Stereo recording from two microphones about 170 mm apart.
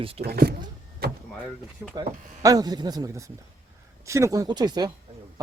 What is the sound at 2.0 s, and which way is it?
Speech, 20° right (ahead or behind).